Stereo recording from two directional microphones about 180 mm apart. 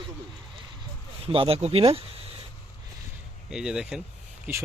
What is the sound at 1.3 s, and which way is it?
Speech, 30° right (ahead or behind).